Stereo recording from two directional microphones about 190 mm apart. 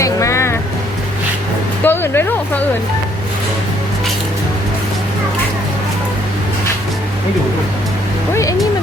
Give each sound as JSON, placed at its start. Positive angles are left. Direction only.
{"t": 0.0, "sound": "vehicle", "side_deg": 15}
{"t": 1.8, "sound": "music", "side_deg": 10}
{"t": 8.3, "sound": "a sound", "side_deg": 15}